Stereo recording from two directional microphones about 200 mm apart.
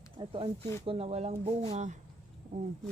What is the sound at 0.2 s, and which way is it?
Speech, 25° right (ahead or behind).